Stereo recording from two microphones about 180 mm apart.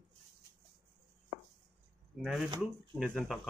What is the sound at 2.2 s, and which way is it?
Speech, 5° right (ahead or behind).